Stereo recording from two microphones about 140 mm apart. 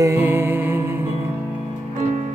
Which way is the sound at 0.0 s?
20° right (ahead or behind).